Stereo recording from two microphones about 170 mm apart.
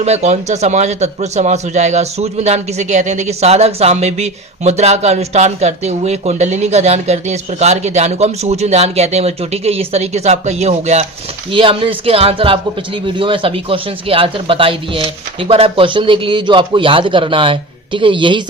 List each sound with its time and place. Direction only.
0.0 s a man's voice: 40° right (ahead or behind)